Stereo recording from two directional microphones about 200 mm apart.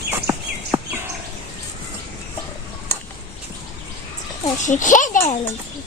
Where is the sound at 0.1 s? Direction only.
10° right (ahead or behind).